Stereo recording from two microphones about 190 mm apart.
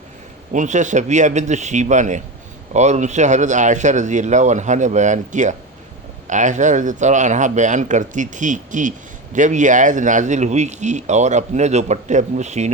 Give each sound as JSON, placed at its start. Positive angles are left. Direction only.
{"t": 0.5, "sound": "speech", "side_deg": -40}